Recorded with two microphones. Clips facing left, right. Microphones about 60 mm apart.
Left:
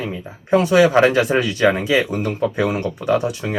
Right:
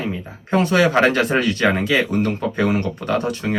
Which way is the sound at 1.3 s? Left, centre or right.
Right.